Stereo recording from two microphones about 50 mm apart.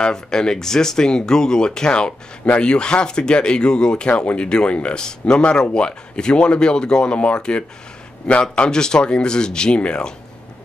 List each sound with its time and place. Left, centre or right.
0.0 s speech: centre